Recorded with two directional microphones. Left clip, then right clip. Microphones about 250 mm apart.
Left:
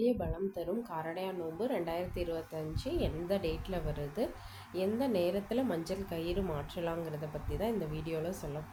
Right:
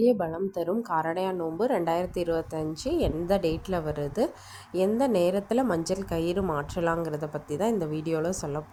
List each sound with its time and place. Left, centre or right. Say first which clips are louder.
0.0 s a woman's voice: right 9 dB; right